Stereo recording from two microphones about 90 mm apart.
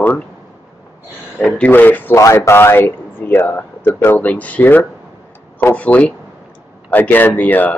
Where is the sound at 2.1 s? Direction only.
35° left (ahead or behind).